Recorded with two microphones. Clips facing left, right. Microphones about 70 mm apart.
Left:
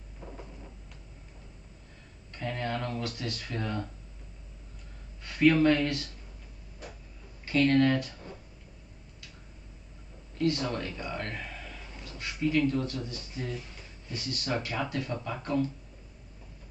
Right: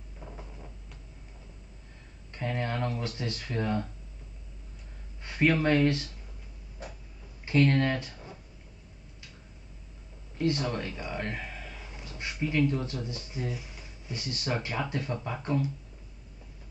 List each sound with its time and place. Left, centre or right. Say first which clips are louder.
0.2 s a sound: left 1 dB; centre
2.3 s speech: right 1 dB; right
5.2 s speech: left 3 dB; right
7.4 s speech: left 1 dB; centre
10.3 s speech: even; right
10.7 s a sound: even; centre
12.2 s speech: left 1 dB; right